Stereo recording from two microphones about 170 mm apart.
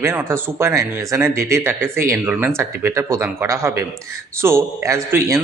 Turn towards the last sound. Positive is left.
turn(degrees=-15)  # may be behind; listen again after turning